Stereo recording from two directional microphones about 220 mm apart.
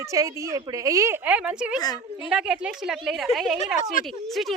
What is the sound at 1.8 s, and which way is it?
Speech, 20° left (ahead or behind).